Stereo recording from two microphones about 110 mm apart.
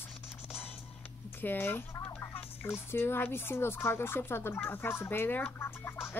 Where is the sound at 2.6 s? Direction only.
20° left (ahead or behind).